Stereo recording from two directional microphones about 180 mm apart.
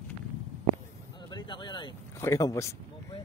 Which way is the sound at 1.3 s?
25° left (ahead or behind).